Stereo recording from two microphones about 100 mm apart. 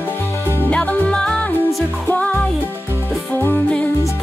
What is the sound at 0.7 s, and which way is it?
Music, 10° left (ahead or behind).